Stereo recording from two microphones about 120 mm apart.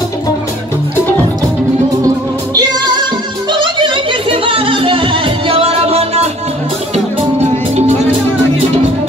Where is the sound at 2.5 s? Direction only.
35° right (ahead or behind); by 7.4 s 65° right (ahead or behind).